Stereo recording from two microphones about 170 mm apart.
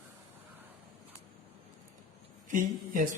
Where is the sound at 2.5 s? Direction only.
50° right (ahead or behind).